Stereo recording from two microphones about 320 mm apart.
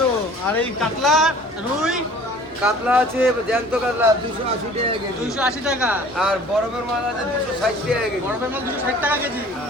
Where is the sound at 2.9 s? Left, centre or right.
Centre.